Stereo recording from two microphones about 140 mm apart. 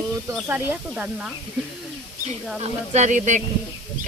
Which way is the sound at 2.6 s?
55° right (ahead or behind).